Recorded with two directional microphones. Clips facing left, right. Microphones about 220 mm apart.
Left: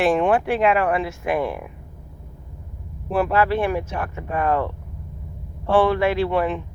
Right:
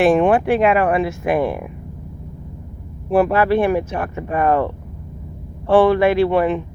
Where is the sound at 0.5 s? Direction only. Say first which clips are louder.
Right 4 dB; 55° right (ahead or behind).